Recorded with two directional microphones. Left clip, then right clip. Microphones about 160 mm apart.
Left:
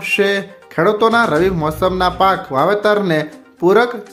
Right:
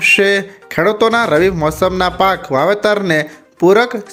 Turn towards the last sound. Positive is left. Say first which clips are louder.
# right 2 dB
turn(degrees=-20)  # may be behind; listen again after turning